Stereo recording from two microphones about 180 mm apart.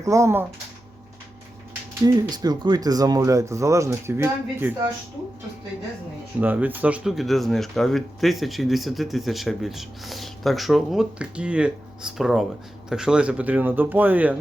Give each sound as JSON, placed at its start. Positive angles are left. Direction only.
{"t": 0.0, "sound": "speech", "side_deg": -15}
{"t": 2.0, "sound": "speech", "side_deg": -20}
{"t": 6.4, "sound": "speech", "side_deg": -10}